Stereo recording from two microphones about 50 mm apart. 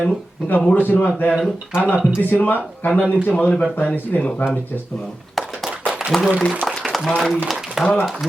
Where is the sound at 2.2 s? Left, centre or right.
Left.